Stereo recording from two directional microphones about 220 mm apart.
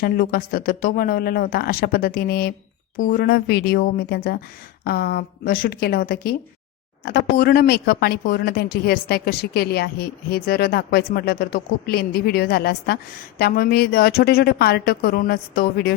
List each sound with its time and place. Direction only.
0.0 s speech: 45° left (ahead or behind)